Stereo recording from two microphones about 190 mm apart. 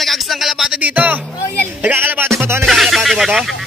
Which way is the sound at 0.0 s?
Centre (ahead or behind).